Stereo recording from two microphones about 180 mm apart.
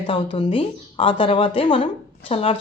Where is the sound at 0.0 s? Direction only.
25° left (ahead or behind).